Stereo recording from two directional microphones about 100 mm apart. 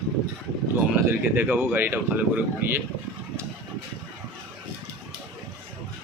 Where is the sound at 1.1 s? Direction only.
20° right (ahead or behind).